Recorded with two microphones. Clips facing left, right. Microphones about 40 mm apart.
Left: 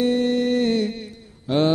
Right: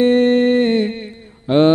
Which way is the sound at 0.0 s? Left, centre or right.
Right.